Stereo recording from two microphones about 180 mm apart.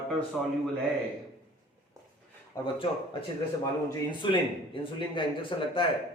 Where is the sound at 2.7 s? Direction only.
30° left (ahead or behind).